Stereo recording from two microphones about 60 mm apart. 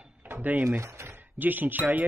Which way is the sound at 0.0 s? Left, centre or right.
Right.